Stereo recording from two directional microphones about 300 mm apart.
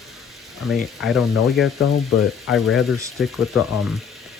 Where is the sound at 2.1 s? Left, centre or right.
Left.